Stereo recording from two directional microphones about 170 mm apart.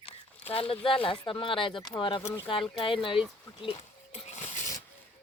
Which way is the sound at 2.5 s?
30° left (ahead or behind).